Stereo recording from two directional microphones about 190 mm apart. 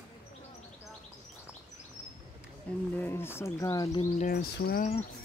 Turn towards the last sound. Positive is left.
turn(degrees=55)  # may be behind; listen again after turning